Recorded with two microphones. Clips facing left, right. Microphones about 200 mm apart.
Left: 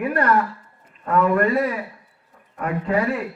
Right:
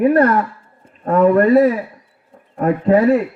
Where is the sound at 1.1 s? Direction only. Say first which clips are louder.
Right 7 dB; 25° right (ahead or behind).